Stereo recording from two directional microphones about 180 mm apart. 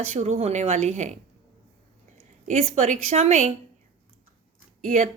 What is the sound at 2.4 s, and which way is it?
A woman's voice, 40° right (ahead or behind).